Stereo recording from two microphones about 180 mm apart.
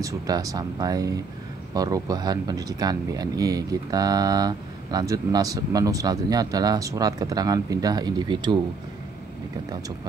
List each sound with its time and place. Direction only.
0.0 s speech: 20° right (ahead or behind)